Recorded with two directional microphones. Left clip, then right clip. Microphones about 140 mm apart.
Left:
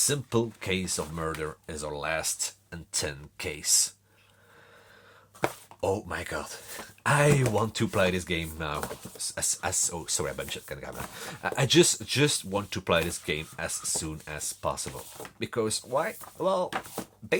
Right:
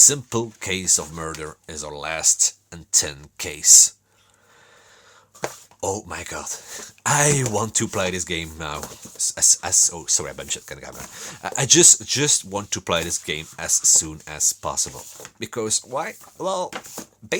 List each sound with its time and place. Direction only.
0.0 s speech: 40° right (ahead or behind)
5.8 s speech: 30° right (ahead or behind)
6.5 s speech: 40° right (ahead or behind)